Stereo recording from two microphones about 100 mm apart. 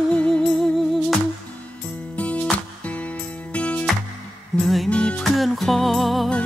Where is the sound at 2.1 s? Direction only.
15° left (ahead or behind).